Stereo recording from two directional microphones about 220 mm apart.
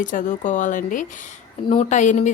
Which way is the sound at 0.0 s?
35° left (ahead or behind).